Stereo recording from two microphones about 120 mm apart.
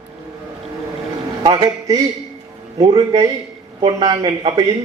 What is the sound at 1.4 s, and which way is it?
A man's voice, 30° right (ahead or behind).